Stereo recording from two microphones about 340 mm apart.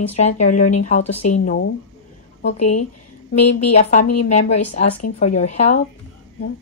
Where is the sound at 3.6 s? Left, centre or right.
Left.